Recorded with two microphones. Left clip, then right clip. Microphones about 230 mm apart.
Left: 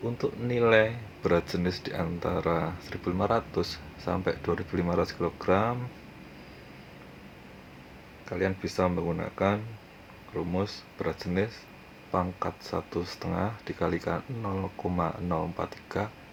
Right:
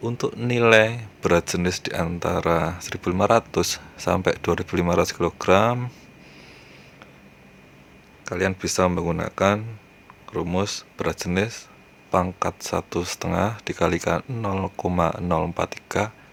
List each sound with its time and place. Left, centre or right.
0.0 s speech: right
8.2 s speech: right